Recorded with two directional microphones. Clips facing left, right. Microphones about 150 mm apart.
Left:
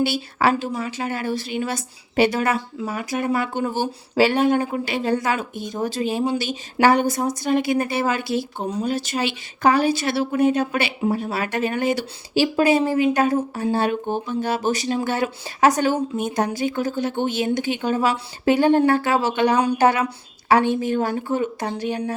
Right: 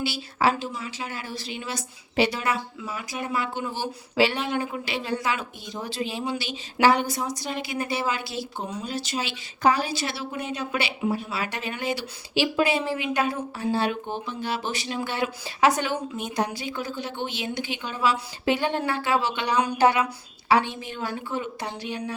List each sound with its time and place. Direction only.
0.0 s a woman's voice: 60° left (ahead or behind)